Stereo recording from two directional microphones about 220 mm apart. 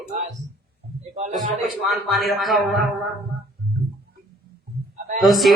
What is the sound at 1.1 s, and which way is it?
Speech, 35° right (ahead or behind).